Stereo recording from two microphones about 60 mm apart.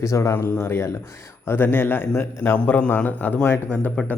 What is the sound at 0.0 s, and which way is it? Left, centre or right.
Speech, left.